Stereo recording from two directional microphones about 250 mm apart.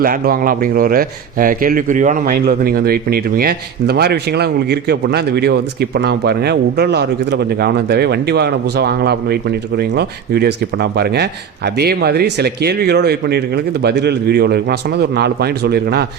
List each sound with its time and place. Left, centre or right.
0.0 s a man's voice: right